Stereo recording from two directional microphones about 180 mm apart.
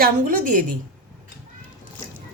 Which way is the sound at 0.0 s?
50° right (ahead or behind).